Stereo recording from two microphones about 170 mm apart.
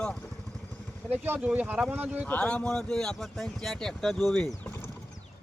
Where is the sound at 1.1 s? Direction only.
10° right (ahead or behind).